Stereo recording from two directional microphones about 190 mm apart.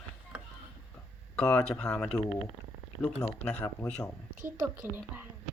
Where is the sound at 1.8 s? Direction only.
5° left (ahead or behind).